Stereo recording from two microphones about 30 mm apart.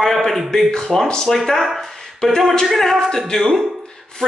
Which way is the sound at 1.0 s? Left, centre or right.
Left.